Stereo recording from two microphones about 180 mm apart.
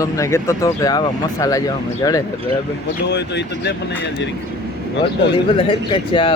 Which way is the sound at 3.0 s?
70° left (ahead or behind).